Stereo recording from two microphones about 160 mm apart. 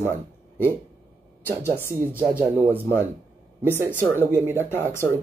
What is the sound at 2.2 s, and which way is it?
Speech, 10° right (ahead or behind).